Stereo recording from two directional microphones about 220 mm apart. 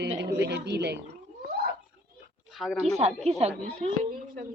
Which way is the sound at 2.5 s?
Centre (ahead or behind).